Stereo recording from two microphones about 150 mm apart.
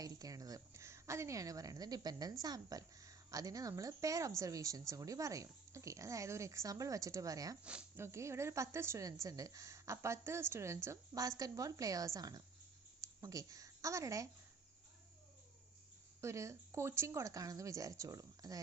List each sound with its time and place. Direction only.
0.0 s a woman's voice: 25° right (ahead or behind)
7.6 s a woman's voice: 5° right (ahead or behind)
16.2 s a woman's voice: 20° right (ahead or behind)